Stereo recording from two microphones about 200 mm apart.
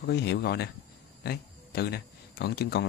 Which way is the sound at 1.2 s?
50° left (ahead or behind).